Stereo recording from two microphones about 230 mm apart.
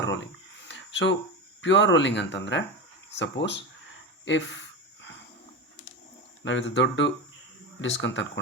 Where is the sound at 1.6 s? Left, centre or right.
Left.